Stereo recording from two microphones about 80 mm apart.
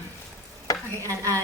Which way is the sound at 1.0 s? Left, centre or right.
Right.